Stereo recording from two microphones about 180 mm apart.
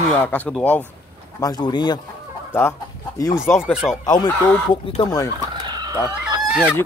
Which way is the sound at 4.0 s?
20° left (ahead or behind).